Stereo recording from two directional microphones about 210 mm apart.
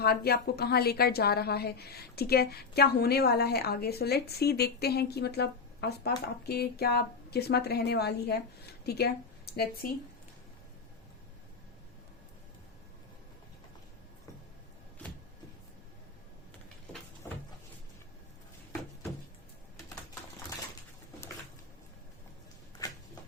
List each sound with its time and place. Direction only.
0.0 s a woman's voice: 50° left (ahead or behind)